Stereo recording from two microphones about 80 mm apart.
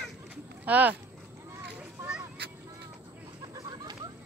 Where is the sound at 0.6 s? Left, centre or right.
Centre.